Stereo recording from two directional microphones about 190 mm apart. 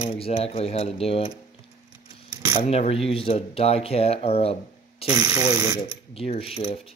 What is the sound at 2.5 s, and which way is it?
A man's voice, 35° left (ahead or behind).